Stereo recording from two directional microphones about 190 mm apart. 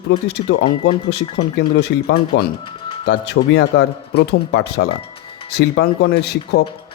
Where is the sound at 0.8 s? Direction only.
60° left (ahead or behind).